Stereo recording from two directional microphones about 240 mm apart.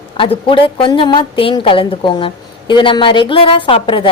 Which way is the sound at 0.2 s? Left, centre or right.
Left.